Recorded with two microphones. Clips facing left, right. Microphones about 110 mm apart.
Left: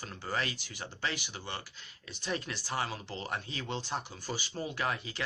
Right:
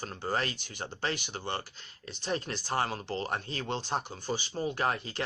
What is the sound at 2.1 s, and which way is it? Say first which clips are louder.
Speech: right 3 dB; 30° right (ahead or behind).